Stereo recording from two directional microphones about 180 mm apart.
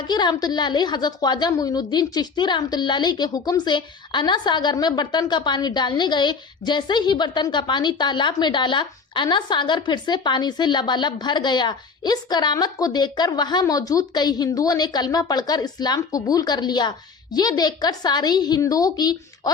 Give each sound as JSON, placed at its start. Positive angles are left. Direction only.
{"t": 0.1, "sound": "a woman's voice", "side_deg": 25}